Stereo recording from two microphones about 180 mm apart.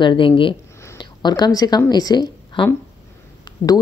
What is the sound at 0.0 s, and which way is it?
A woman's voice, 25° left (ahead or behind).